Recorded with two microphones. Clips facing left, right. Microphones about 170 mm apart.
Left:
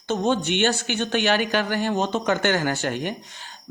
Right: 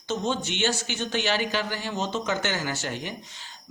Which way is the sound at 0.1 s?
55° left (ahead or behind).